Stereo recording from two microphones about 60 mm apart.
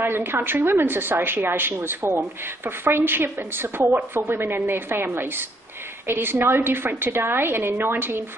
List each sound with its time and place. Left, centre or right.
0.0 s a woman's voice: right